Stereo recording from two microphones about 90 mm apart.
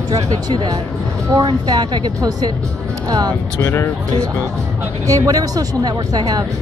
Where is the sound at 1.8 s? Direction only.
60° right (ahead or behind).